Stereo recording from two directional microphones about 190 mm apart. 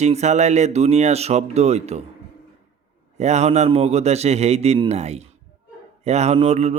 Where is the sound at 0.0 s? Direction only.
35° right (ahead or behind).